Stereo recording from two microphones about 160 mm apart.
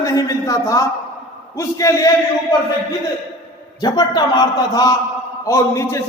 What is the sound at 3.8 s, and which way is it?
A man's voice, 25° left (ahead or behind).